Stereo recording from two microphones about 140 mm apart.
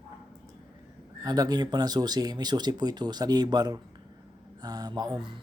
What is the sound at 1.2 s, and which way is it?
Speech, 25° right (ahead or behind).